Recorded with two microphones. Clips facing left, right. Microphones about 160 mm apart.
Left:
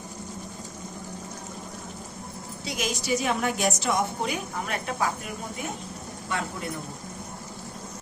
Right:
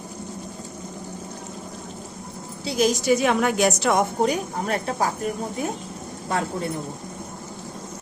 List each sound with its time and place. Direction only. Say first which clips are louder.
2.6 s a woman's voice: right 10 dB; 35° right (ahead or behind)
3.1 s a woman's voice: right 6 dB; 70° right (ahead or behind)
4.2 s a woman's voice: right 7 dB; 40° right (ahead or behind)